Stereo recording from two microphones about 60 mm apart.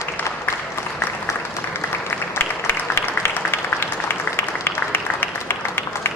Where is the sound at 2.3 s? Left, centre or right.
Left.